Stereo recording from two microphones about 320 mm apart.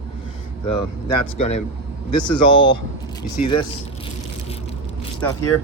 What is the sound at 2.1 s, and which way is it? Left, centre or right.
Speech, left.